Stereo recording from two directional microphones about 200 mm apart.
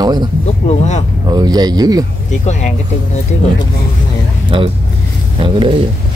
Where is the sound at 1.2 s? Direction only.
20° right (ahead or behind).